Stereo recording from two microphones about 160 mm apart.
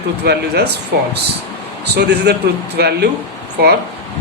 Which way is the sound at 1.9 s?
90° right.